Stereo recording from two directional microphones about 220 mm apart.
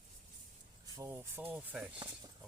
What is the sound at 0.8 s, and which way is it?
Speech, 15° right (ahead or behind).